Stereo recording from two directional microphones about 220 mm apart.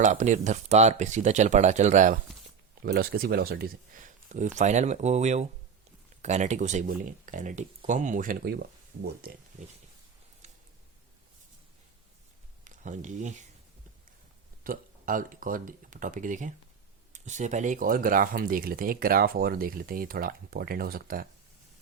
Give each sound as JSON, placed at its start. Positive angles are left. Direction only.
{"t": 0.0, "sound": "speech", "side_deg": -35}
{"t": 12.6, "sound": "speech", "side_deg": -35}
{"t": 14.6, "sound": "speech", "side_deg": -40}